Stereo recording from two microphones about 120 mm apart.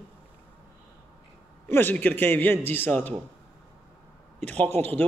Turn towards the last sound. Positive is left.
turn(degrees=-60)  # may be behind; listen again after turning